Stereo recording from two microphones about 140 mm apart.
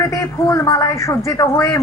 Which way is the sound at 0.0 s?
20° left (ahead or behind).